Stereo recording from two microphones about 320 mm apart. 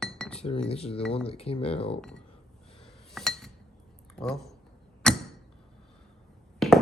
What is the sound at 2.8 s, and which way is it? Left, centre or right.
Cutlery, centre.